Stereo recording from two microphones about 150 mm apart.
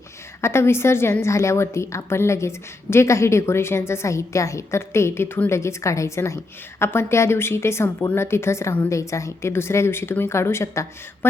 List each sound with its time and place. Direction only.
0.4 s a woman's voice: 15° left (ahead or behind)